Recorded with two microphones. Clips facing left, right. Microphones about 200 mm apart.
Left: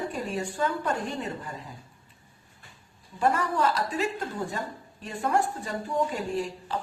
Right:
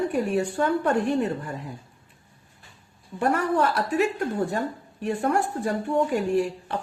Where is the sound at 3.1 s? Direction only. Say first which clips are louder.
Right 3 dB; 65° right (ahead or behind).